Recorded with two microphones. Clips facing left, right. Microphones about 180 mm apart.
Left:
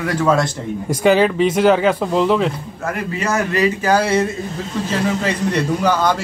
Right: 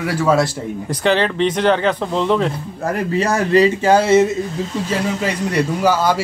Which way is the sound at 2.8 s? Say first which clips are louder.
Right 4 dB; 35° right (ahead or behind).